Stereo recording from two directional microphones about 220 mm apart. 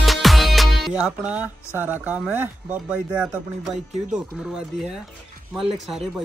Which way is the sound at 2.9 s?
5° right (ahead or behind).